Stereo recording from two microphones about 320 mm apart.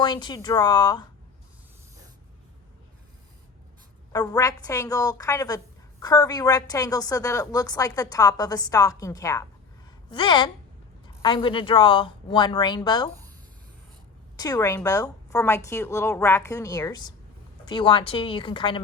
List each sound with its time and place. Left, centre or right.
0.0 s a woman's voice: centre
4.1 s a woman's voice: centre
14.3 s a woman's voice: centre